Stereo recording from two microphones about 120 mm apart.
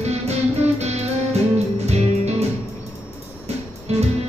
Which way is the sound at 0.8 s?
65° right (ahead or behind).